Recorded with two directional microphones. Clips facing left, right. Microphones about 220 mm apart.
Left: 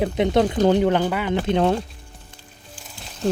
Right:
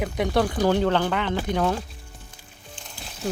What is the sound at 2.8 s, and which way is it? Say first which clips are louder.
Music: left 6 dB; centre (ahead or behind).